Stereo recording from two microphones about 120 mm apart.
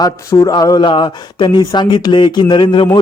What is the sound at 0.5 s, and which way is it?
Speech, 35° left (ahead or behind).